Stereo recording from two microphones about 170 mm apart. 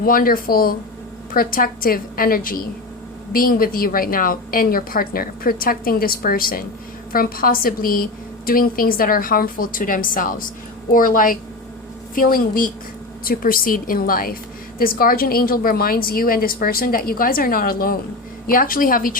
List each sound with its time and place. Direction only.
0.0 s a woman's voice: 55° left (ahead or behind)